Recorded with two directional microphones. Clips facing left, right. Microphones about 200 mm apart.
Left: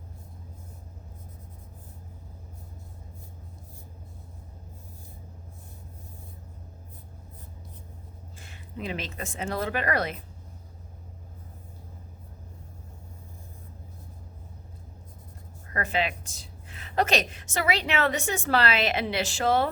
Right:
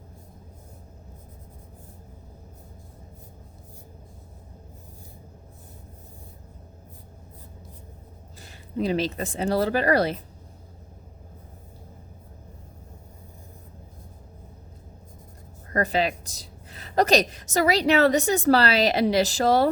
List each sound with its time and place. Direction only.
8.4 s speech: 35° right (ahead or behind)
15.7 s a woman's voice: 40° right (ahead or behind)